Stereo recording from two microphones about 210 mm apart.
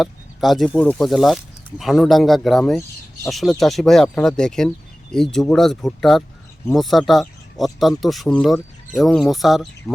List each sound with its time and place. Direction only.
0.0 s speech: centre (ahead or behind)